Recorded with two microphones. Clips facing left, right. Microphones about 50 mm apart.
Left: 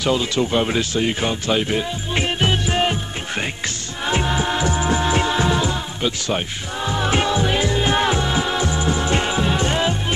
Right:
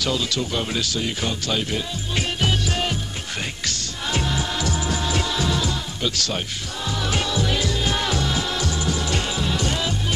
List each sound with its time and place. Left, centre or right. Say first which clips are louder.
0.0 s speech: left 5 dB; left
3.6 s music: left 3 dB; left